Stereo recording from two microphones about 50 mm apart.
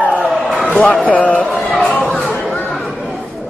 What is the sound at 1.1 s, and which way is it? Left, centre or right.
Speech, left.